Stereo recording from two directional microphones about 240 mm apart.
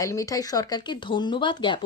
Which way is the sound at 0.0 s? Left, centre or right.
Centre.